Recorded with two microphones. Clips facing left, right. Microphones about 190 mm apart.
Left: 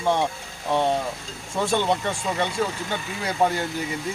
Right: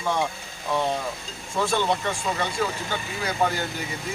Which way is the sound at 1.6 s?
20° left (ahead or behind).